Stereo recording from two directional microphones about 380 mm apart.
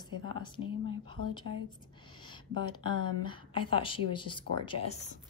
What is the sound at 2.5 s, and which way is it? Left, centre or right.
Speech, right.